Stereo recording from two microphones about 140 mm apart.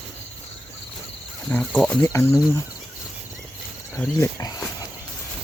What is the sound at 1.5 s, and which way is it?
Speech, 5° left (ahead or behind).